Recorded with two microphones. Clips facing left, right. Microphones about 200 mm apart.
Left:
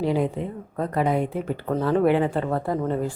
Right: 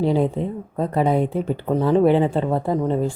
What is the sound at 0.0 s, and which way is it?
Speech, 30° right (ahead or behind).